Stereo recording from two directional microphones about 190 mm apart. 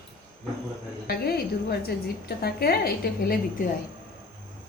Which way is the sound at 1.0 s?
55° left (ahead or behind).